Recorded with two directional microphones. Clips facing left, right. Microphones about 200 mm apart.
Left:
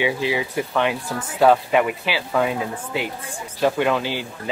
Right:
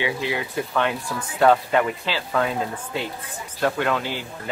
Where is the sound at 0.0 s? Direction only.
15° left (ahead or behind).